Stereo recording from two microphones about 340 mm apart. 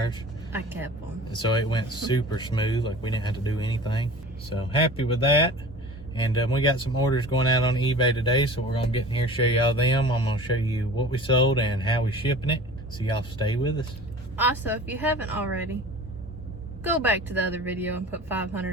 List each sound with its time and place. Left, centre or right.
0.5 s speech: centre
1.3 s speech: centre
14.3 s speech: centre
16.8 s speech: centre